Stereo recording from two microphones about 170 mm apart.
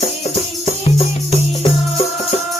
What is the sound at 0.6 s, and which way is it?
Music, 35° left (ahead or behind).